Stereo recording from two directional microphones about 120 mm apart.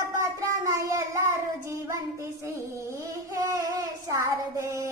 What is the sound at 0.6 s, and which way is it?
Child singing, 25° right (ahead or behind).